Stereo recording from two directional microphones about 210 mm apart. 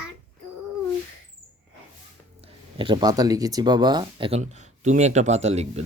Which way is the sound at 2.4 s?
25° right (ahead or behind).